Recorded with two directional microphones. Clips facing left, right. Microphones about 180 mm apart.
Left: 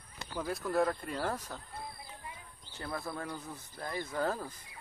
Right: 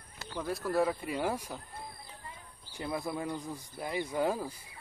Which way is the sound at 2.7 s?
15° right (ahead or behind).